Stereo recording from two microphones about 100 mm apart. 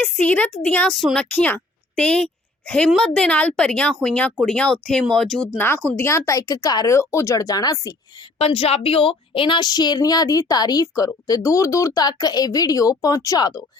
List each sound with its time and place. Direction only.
0.0 s speech: 10° left (ahead or behind)
0.9 s speech: centre (ahead or behind)
5.5 s a woman's voice: 20° left (ahead or behind); by 6.9 s 40° left (ahead or behind)
6.9 s a woman's voice: 30° left (ahead or behind)
8.4 s a woman's voice: 80° left; by 13.7 s 40° left (ahead or behind)